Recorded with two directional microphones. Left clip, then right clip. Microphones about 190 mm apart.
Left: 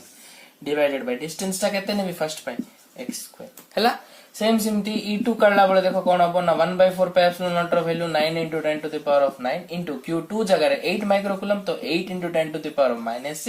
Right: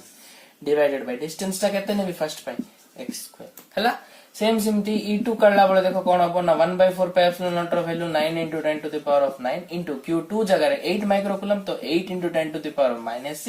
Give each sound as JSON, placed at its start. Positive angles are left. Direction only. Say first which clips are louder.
{"t": 0.8, "sound": "speech", "louder": "left 2 dB", "side_deg": 25}
{"t": 4.8, "sound": "speech", "louder": "right 1 dB", "side_deg": 35}